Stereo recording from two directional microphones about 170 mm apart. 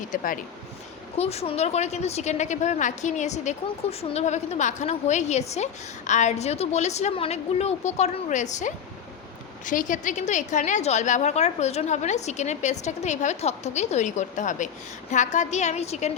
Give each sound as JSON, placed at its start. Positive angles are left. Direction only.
{"t": 0.1, "sound": "a woman's voice", "side_deg": 50}
{"t": 1.1, "sound": "a woman's voice", "side_deg": 35}